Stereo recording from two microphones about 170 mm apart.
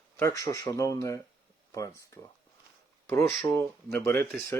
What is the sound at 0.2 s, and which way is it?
Speech, 20° left (ahead or behind).